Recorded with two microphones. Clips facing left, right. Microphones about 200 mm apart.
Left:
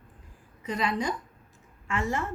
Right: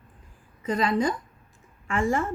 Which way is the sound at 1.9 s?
50° right (ahead or behind).